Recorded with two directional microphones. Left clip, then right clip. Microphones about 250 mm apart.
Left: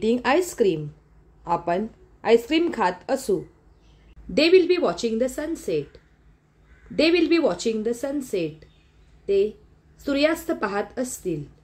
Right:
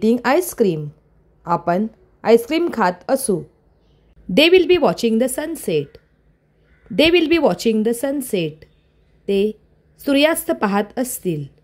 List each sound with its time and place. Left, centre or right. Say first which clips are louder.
0.0 s a woman's voice: right 4 dB; right
4.3 s a woman's voice: right 5 dB; right